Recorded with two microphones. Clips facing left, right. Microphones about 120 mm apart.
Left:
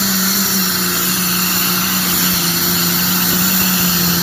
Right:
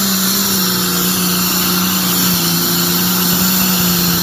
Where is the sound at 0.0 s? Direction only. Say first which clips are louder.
Right 1 dB; 15° right (ahead or behind).